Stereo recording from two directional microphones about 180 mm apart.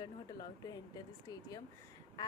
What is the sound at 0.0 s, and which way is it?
A woman's voice, 20° left (ahead or behind).